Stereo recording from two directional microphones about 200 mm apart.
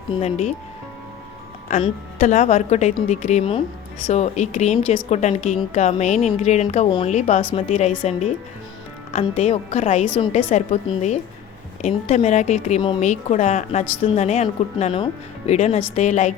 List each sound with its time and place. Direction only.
0.2 s speech: 30° left (ahead or behind)
1.8 s speech: 35° left (ahead or behind)
9.1 s speech: 30° left (ahead or behind)